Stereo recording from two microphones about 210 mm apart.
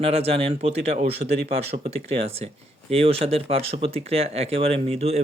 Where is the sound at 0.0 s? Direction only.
30° right (ahead or behind).